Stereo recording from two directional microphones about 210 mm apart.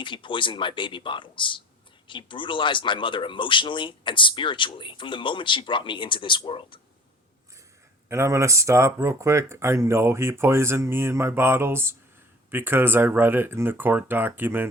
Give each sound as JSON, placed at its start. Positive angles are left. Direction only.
{"t": 0.0, "sound": "speech", "side_deg": 25}
{"t": 8.1, "sound": "speech", "side_deg": -15}